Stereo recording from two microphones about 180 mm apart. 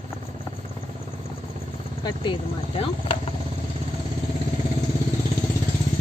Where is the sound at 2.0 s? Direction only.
25° left (ahead or behind).